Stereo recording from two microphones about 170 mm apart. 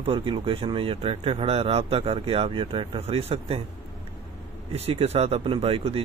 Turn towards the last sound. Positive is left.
turn(degrees=-35)  # may be behind; listen again after turning